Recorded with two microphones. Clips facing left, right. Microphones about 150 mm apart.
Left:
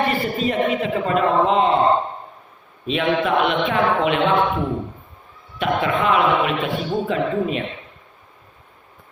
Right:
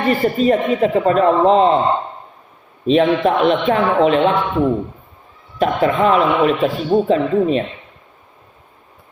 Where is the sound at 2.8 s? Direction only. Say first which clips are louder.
Right 7 dB; 35° right (ahead or behind).